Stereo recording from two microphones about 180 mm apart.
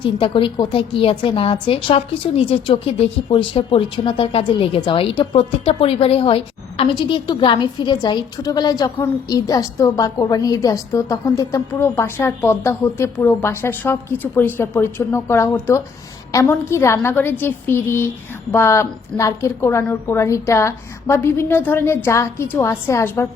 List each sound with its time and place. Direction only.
0.0 s a woman's voice: 30° left (ahead or behind); by 23.3 s 15° left (ahead or behind)